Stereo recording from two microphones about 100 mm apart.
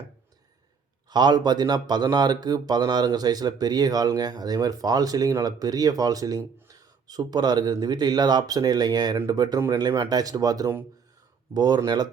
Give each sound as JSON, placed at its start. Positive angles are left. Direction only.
{"t": 1.1, "sound": "speech", "side_deg": -45}